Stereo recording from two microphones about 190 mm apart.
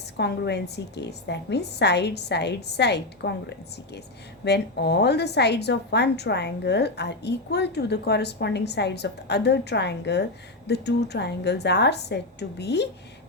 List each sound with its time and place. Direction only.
0.2 s a woman's voice: 60° left (ahead or behind)
4.4 s a woman's voice: 60° left (ahead or behind)